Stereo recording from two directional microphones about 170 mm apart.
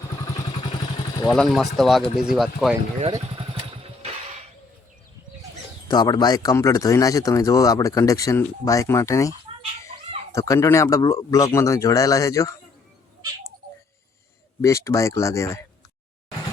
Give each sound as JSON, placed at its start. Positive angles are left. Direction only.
{"t": 1.3, "sound": "speech", "side_deg": 0}
{"t": 3.2, "sound": "motorcycle", "side_deg": -35}
{"t": 5.9, "sound": "speech", "side_deg": 25}
{"t": 10.3, "sound": "speech", "side_deg": 20}
{"t": 14.6, "sound": "speech", "side_deg": 20}